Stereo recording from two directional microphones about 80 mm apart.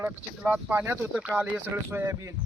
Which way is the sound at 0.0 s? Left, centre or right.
Right.